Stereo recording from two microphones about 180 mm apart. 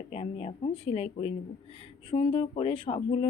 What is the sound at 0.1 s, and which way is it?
Speech, 35° left (ahead or behind).